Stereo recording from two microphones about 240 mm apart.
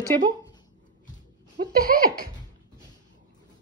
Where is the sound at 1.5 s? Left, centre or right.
Right.